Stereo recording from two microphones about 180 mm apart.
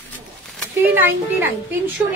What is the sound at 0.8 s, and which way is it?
Speech, 10° right (ahead or behind).